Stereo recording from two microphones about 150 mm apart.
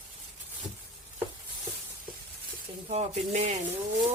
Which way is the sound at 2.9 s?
45° right (ahead or behind).